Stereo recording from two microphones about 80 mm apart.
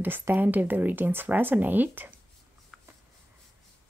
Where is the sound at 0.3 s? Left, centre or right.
Right.